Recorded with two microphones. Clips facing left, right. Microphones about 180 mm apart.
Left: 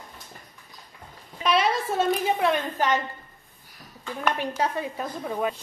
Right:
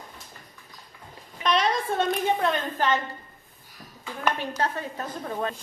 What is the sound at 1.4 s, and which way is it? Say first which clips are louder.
A woman's voice: left 1 dB; 5° left (ahead or behind).